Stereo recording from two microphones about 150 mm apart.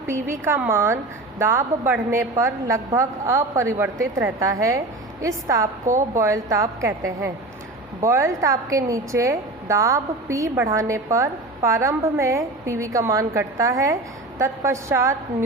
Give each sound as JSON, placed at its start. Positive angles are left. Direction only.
{"t": 0.4, "sound": "a woman's voice", "side_deg": -15}